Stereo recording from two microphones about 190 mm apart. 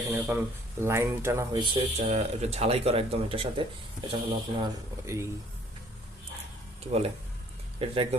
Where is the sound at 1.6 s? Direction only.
35° right (ahead or behind).